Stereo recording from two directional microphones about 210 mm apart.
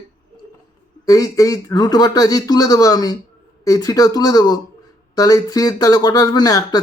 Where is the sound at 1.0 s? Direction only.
15° left (ahead or behind).